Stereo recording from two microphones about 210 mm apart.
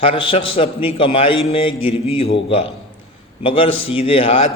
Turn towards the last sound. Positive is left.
turn(degrees=25)  # may be behind; listen again after turning